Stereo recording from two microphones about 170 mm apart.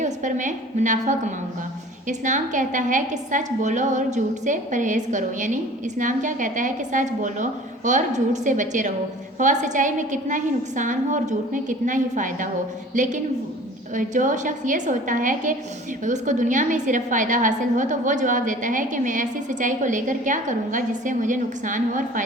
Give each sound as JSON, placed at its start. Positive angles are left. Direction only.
{"t": 0.0, "sound": "a woman's voice", "side_deg": -45}